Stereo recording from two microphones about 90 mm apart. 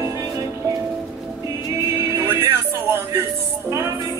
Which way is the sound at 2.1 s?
35° right (ahead or behind).